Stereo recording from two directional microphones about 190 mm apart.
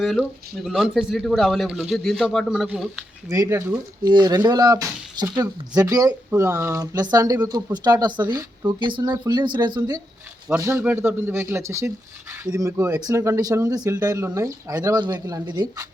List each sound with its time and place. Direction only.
0.0 s speech: centre (ahead or behind)
3.2 s speech: 15° right (ahead or behind)